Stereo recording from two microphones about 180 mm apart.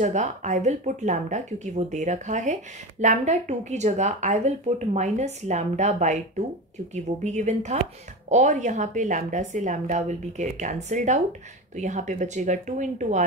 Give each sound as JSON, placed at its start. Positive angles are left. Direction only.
{"t": 0.0, "sound": "speech", "side_deg": -40}